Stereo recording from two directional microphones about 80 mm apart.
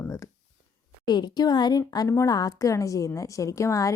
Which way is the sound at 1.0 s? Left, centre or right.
Left.